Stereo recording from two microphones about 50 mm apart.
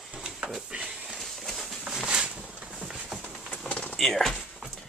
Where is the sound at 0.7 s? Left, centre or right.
Right.